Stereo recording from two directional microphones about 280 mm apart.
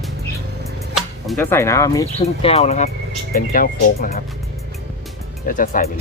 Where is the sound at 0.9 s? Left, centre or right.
Centre; by 4.2 s left.